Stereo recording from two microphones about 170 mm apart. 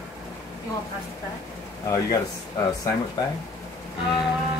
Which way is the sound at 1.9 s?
20° left (ahead or behind).